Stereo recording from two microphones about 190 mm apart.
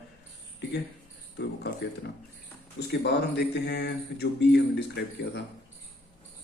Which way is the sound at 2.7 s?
60° left (ahead or behind).